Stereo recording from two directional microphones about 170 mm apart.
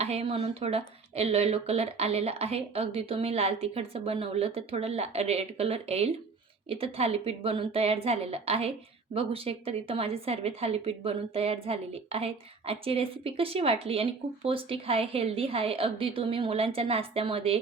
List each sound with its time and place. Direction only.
0.0 s speech: 35° right (ahead or behind)